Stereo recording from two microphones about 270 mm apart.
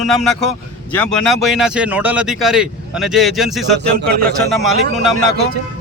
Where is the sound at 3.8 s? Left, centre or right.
Right.